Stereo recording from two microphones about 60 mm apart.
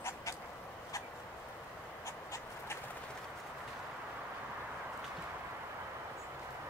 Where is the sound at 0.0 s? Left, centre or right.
Left.